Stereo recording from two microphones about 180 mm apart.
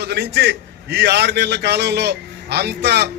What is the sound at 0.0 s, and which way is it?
A man's voice, 70° right (ahead or behind).